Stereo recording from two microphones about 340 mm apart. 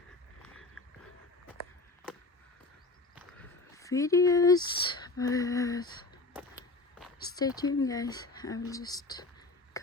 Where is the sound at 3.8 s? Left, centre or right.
Centre.